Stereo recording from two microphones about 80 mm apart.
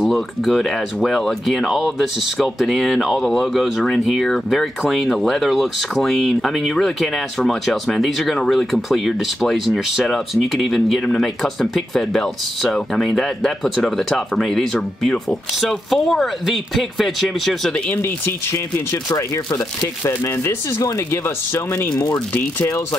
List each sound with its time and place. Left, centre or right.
0.0 s speech: centre
17.9 s speech: left
19.1 s speech: left